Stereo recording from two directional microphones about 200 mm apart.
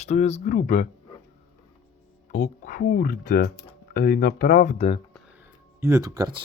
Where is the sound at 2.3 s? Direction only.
40° left (ahead or behind).